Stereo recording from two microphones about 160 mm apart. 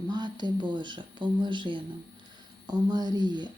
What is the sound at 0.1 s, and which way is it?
Speech, 25° right (ahead or behind).